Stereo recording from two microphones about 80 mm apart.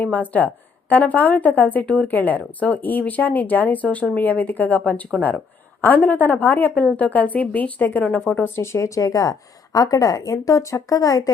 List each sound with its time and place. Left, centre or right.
0.0 s a woman's voice: left
8.5 s speech: left